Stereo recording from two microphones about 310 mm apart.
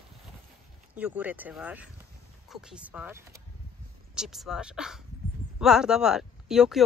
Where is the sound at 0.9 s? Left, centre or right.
Centre.